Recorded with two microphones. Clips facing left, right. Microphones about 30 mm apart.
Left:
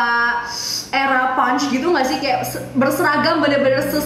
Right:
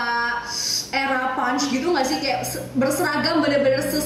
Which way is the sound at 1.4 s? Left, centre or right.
Centre.